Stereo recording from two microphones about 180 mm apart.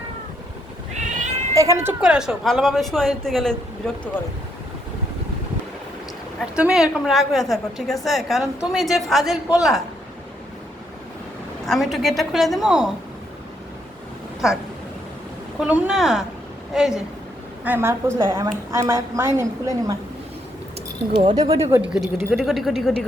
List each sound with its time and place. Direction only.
0.9 s cat: 45° right (ahead or behind)
1.5 s a woman's voice: 15° right (ahead or behind); by 4.1 s 5° left (ahead or behind)
6.4 s a woman's voice: 5° right (ahead or behind)
11.6 s a woman's voice: centre (ahead or behind)
14.4 s a woman's voice: 5° right (ahead or behind)
15.6 s a woman's voice: 5° right (ahead or behind)
21.2 s speech: 25° right (ahead or behind)
21.7 s a woman's voice: 5° right (ahead or behind)